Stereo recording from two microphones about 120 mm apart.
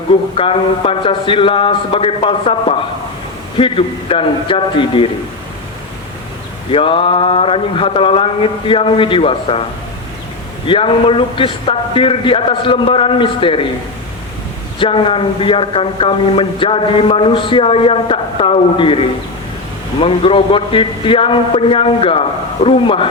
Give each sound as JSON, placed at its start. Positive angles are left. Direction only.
{"t": 0.1, "sound": "a man's voice", "side_deg": 45}
{"t": 6.7, "sound": "a man's voice", "side_deg": 50}
{"t": 10.7, "sound": "a man's voice", "side_deg": 50}
{"t": 14.8, "sound": "a man's voice", "side_deg": 45}